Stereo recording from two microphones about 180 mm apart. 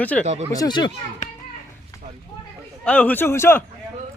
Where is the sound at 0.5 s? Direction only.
20° left (ahead or behind).